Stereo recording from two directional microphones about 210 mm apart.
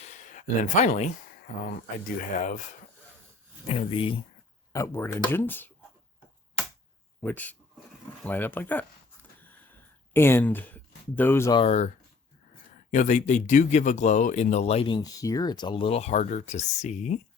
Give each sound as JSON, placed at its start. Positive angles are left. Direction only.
{"t": 0.1, "sound": "speech", "side_deg": 35}
{"t": 2.1, "sound": "speech", "side_deg": 35}
{"t": 3.7, "sound": "speech", "side_deg": 25}
{"t": 4.7, "sound": "speech", "side_deg": 15}
{"t": 7.2, "sound": "speech", "side_deg": 10}
{"t": 10.1, "sound": "speech", "side_deg": 10}
{"t": 11.6, "sound": "speech", "side_deg": 30}
{"t": 12.9, "sound": "speech", "side_deg": 35}